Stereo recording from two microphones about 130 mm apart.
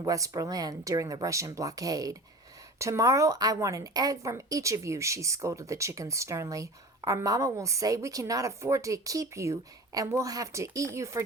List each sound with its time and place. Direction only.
0.0 s a woman's voice: 25° right (ahead or behind)